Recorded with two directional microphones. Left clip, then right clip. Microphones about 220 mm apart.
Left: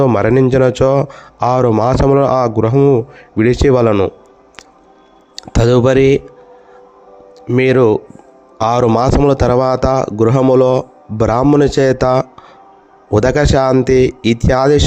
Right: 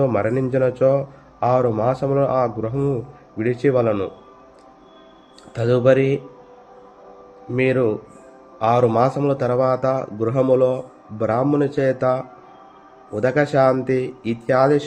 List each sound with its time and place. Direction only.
0.0 s speech: 50° left (ahead or behind)
5.5 s speech: 50° left (ahead or behind)
7.5 s speech: 50° left (ahead or behind)